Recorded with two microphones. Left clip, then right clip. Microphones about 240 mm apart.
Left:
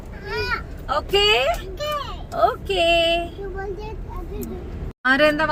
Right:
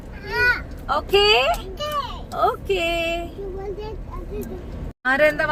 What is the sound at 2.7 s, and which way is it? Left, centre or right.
Speech, centre.